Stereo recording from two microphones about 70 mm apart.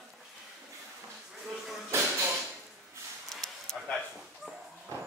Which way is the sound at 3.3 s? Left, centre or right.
Centre.